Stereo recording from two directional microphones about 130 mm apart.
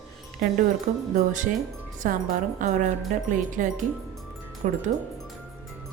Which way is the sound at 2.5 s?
75° right (ahead or behind).